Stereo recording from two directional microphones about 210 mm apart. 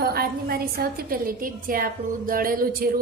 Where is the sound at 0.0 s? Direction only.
45° right (ahead or behind).